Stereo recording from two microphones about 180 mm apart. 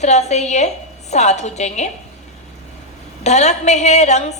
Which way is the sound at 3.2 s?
40° left (ahead or behind).